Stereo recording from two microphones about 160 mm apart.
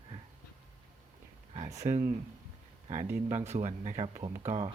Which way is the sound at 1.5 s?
45° right (ahead or behind).